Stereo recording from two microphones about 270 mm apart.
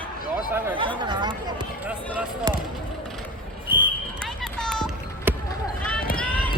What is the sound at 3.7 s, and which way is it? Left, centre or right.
Basketball bounce, centre.